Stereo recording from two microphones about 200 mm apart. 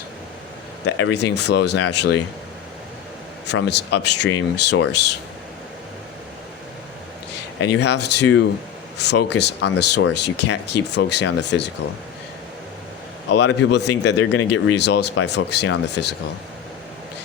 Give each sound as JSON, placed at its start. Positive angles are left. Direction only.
{"t": 0.9, "sound": "speech", "side_deg": 65}
{"t": 3.4, "sound": "speech", "side_deg": 60}
{"t": 7.6, "sound": "speech", "side_deg": 60}
{"t": 13.4, "sound": "speech", "side_deg": 60}